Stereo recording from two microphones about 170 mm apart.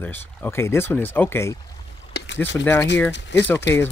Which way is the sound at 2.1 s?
75° left (ahead or behind).